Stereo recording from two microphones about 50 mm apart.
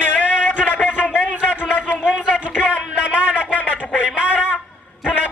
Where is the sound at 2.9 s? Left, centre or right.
Right.